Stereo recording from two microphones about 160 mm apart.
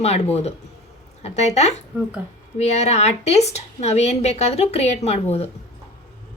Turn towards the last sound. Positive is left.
turn(degrees=40)  # may be behind; listen again after turning